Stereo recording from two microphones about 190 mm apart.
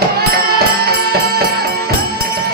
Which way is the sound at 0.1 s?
55° right (ahead or behind).